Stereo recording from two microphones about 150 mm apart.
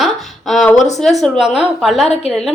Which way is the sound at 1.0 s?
Centre (ahead or behind).